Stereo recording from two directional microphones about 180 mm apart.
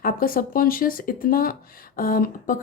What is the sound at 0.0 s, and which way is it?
Speech, 50° left (ahead or behind).